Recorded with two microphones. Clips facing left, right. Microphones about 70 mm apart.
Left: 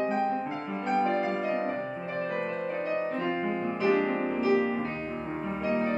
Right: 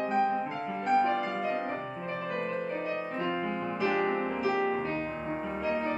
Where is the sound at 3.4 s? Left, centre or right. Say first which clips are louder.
Left 3 dB; centre.